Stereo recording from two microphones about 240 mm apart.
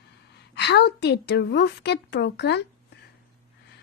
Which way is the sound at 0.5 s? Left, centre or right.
Left.